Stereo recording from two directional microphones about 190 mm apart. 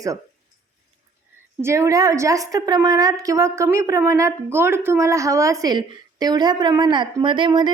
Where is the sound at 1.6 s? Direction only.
15° right (ahead or behind).